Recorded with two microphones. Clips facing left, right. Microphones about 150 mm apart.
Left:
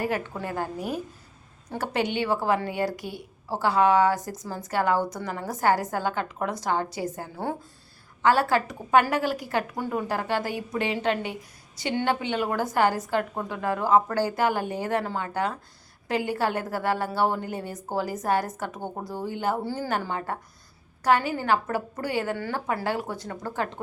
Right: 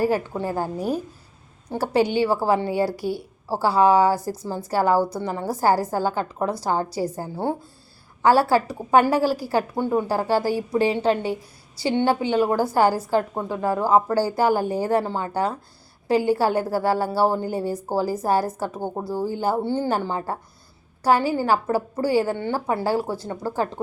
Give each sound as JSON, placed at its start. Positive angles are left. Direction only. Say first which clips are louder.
{"t": 0.0, "sound": "a woman's voice", "louder": "right 6 dB", "side_deg": -35}